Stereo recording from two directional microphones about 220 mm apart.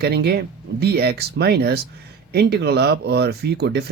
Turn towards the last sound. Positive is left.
turn(degrees=-50)  # may be behind; listen again after turning